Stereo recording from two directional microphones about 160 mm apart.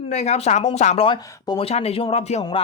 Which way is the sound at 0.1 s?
45° left (ahead or behind).